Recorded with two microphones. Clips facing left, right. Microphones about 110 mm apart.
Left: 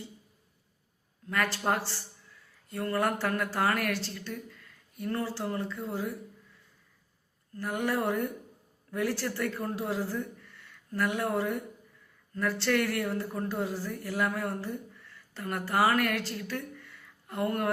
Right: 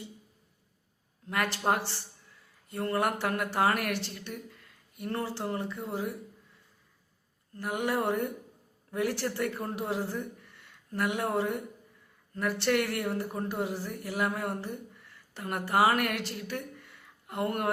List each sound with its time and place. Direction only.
1.3 s a woman's voice: 20° right (ahead or behind)
7.5 s a woman's voice: 20° right (ahead or behind)